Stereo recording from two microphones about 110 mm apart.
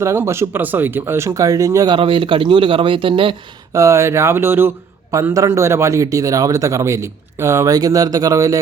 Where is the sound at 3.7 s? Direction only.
25° right (ahead or behind).